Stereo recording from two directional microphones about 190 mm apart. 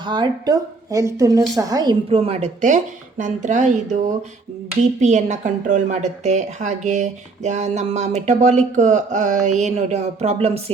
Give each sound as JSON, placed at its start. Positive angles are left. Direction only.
{"t": 0.0, "sound": "a woman's voice", "side_deg": -25}